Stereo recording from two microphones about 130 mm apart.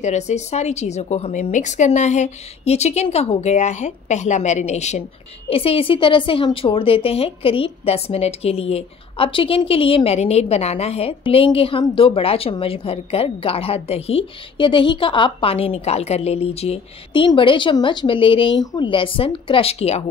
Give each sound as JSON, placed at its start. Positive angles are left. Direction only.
{"t": 0.0, "sound": "a woman's voice", "side_deg": 60}
{"t": 5.5, "sound": "a woman's voice", "side_deg": 45}